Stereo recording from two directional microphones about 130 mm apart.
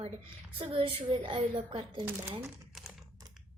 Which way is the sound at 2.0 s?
15° right (ahead or behind).